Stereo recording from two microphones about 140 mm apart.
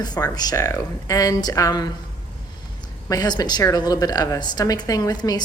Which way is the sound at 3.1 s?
30° left (ahead or behind).